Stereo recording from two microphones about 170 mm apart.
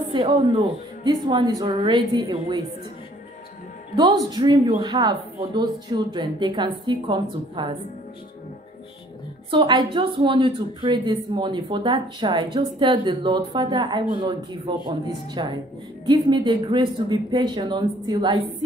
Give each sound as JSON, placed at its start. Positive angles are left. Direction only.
{"t": 0.1, "sound": "a woman's voice", "side_deg": -30}
{"t": 3.9, "sound": "a woman's voice", "side_deg": -25}
{"t": 9.5, "sound": "a woman's voice", "side_deg": -25}